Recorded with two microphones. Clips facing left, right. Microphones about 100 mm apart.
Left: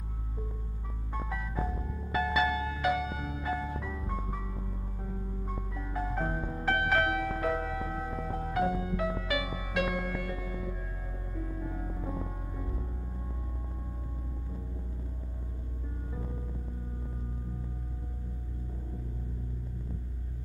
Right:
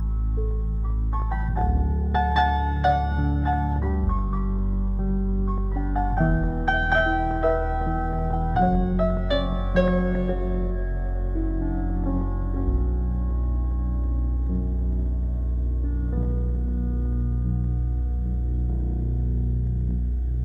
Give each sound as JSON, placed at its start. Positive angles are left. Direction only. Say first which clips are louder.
{"t": 1.3, "sound": "music", "louder": "right 9 dB", "side_deg": -30}